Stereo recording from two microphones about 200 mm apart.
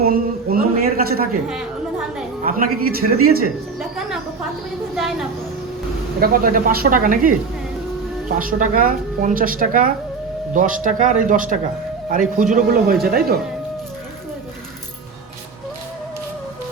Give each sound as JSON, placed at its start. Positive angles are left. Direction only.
{"t": 0.0, "sound": "a sound", "side_deg": -50}
{"t": 2.4, "sound": "a woman's voice", "side_deg": -45}
{"t": 3.8, "sound": "cricket", "side_deg": 0}
{"t": 6.1, "sound": "a woman's voice", "side_deg": -45}
{"t": 8.4, "sound": "a woman's voice", "side_deg": -40}